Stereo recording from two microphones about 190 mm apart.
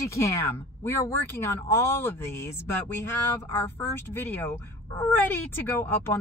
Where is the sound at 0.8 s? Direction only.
10° left (ahead or behind).